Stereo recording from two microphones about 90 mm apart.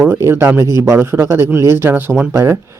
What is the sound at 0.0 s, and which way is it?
Speech, 25° right (ahead or behind).